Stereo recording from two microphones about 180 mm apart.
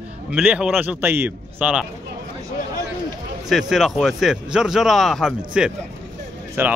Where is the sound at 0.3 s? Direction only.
5° right (ahead or behind).